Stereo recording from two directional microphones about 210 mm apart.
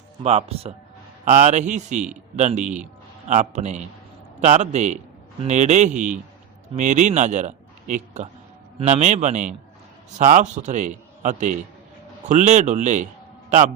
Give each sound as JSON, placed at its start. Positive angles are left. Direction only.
{"t": 0.2, "sound": "a man's voice", "side_deg": -30}